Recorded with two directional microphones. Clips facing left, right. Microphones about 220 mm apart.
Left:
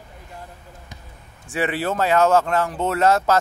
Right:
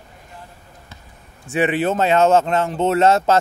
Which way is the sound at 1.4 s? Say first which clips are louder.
Right 5 dB; 20° right (ahead or behind).